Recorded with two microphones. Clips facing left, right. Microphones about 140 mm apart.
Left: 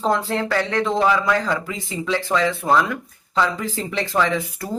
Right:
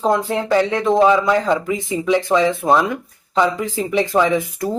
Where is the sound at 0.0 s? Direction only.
15° right (ahead or behind).